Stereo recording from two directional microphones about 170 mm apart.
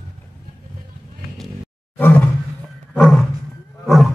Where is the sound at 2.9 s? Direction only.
5° left (ahead or behind).